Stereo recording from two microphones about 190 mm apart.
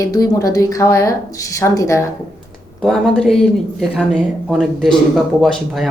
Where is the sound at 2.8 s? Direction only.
Centre (ahead or behind).